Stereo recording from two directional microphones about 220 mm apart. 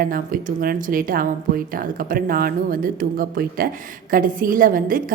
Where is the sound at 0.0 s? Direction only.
40° right (ahead or behind).